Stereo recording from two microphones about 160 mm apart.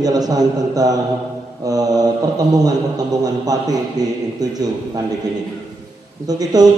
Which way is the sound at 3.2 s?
25° right (ahead or behind).